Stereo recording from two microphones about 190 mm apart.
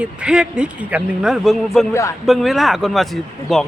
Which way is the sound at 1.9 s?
15° left (ahead or behind).